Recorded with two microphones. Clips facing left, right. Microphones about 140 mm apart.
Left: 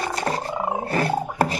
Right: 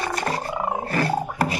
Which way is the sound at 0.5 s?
5° left (ahead or behind).